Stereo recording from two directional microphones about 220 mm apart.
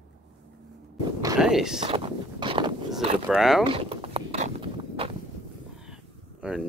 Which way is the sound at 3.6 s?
25° right (ahead or behind).